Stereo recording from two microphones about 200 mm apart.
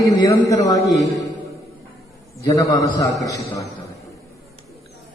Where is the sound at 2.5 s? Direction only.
15° left (ahead or behind).